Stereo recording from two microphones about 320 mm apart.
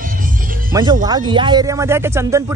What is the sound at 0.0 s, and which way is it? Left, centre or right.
Music, right.